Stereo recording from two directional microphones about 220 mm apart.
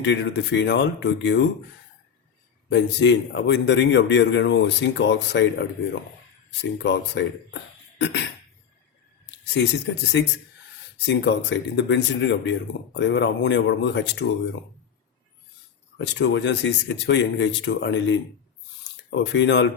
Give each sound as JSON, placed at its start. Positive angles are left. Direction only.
{"t": 0.0, "sound": "a man's voice", "side_deg": 55}
{"t": 2.6, "sound": "a man's voice", "side_deg": 55}
{"t": 9.7, "sound": "a man's voice", "side_deg": 55}
{"t": 16.0, "sound": "a man's voice", "side_deg": 55}
{"t": 19.1, "sound": "a man's voice", "side_deg": 55}